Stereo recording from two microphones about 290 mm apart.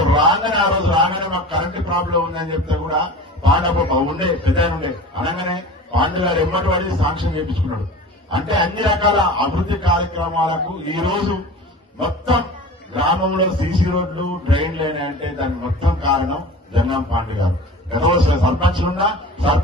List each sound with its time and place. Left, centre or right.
0.0 s a man's voice: centre